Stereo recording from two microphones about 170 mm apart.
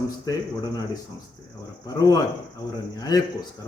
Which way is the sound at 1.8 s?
20° left (ahead or behind).